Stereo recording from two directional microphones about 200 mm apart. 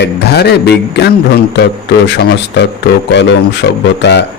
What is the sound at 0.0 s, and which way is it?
Speech, 55° left (ahead or behind).